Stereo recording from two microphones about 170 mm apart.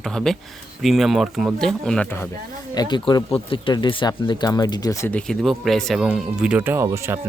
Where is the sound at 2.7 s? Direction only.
25° left (ahead or behind).